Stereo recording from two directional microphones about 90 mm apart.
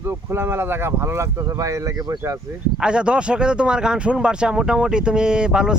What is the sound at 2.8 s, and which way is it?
Speech, 10° right (ahead or behind).